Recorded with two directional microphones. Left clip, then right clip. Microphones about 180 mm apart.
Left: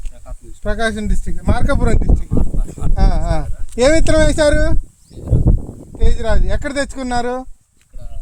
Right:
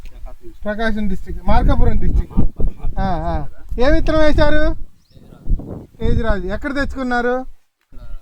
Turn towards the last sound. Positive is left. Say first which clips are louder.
# right 2 dB
turn(degrees=20)  # may be behind; listen again after turning